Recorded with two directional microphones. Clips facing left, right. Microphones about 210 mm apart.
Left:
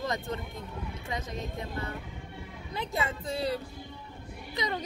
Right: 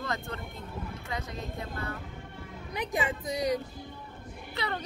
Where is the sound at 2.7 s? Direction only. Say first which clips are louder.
Right 2 dB; 15° right (ahead or behind).